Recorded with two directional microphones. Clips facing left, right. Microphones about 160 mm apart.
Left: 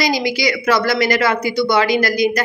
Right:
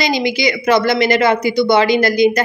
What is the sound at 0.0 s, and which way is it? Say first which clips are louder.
A woman's voice: right 2 dB; 25° right (ahead or behind).